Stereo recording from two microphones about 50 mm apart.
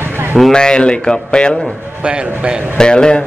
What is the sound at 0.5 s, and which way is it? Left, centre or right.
Speech, centre.